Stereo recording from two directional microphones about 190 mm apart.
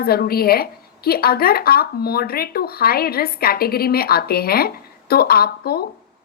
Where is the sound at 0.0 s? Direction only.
55° left (ahead or behind).